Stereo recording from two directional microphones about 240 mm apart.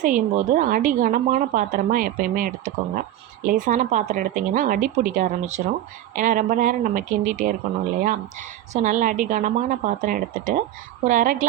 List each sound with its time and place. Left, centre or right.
0.0 s a woman's voice: right